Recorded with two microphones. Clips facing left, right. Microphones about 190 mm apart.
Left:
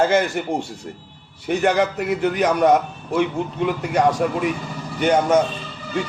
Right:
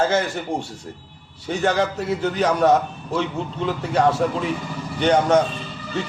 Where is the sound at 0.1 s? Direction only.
15° left (ahead or behind).